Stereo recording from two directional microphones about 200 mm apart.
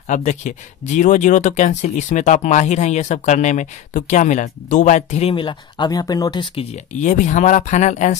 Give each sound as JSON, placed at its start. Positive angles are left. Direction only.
{"t": 0.1, "sound": "speech", "side_deg": 40}